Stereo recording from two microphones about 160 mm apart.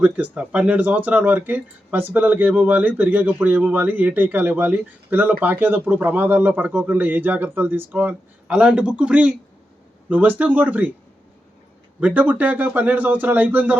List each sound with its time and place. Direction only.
0.0 s speech: 10° right (ahead or behind)
11.9 s speech: 10° right (ahead or behind)